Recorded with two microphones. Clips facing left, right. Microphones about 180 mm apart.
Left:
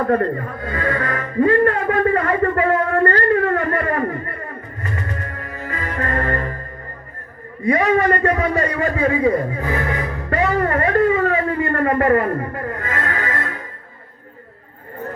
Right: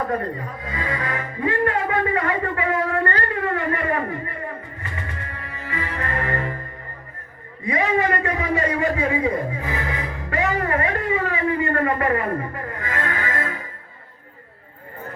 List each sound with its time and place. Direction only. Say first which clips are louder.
0.1 s music: left 7 dB; 55° left (ahead or behind)
7.7 s a man's voice: left 5 dB; 45° left (ahead or behind)
11.8 s a sound: left 5 dB; 45° left (ahead or behind)